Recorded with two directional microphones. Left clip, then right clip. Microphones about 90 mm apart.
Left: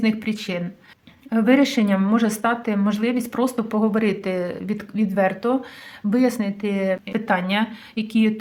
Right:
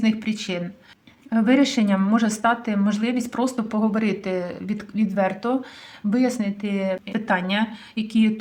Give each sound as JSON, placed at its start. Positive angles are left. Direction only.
{"t": 0.0, "sound": "speech", "side_deg": 25}
{"t": 6.1, "sound": "speech", "side_deg": 45}